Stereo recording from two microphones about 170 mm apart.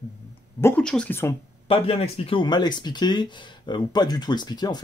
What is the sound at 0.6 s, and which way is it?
Speech, 10° left (ahead or behind).